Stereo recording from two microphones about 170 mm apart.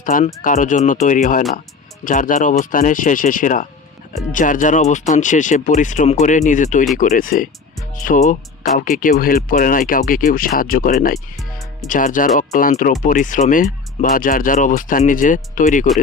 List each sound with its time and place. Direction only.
0.0 s speech: 50° left (ahead or behind)
11.3 s music: centre (ahead or behind)
11.9 s speech: 50° left (ahead or behind)